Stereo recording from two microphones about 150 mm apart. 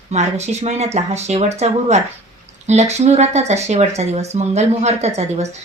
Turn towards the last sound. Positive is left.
turn(degrees=-45)  # may be behind; listen again after turning